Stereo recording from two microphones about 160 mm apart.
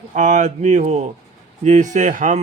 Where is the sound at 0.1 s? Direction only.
50° right (ahead or behind).